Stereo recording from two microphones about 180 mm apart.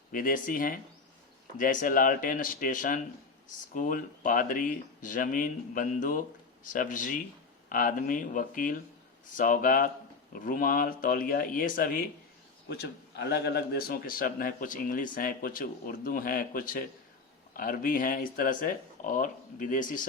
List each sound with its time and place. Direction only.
0.1 s a man's voice: 50° left (ahead or behind)
12.6 s a man's voice: 65° left (ahead or behind); by 20.1 s 45° left (ahead or behind)